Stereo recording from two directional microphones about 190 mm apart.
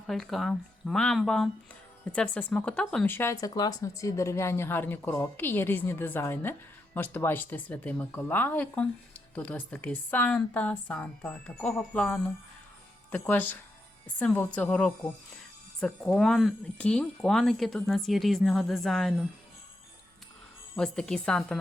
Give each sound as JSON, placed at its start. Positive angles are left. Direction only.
{"t": 0.1, "sound": "speech", "side_deg": 0}
{"t": 20.7, "sound": "speech", "side_deg": 5}